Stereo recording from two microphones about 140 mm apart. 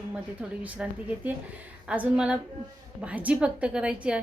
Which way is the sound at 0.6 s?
10° right (ahead or behind).